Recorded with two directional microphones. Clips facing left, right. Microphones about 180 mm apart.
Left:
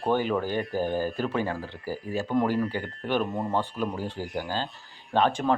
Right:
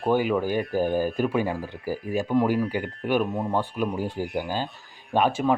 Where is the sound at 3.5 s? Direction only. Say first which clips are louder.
Right 2 dB; 15° right (ahead or behind).